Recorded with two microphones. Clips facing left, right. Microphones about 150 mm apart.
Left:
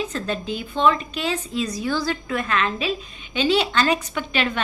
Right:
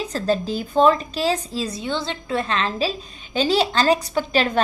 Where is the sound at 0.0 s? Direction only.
35° right (ahead or behind).